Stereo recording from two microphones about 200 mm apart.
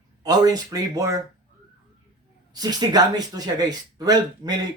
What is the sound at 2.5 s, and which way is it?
Speech, 20° right (ahead or behind).